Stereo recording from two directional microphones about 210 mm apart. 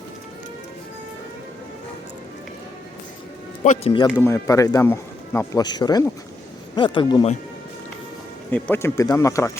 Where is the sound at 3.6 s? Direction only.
30° left (ahead or behind).